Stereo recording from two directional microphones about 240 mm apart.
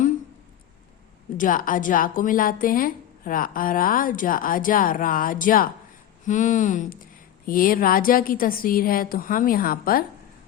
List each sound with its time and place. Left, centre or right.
1.4 s a woman's voice: left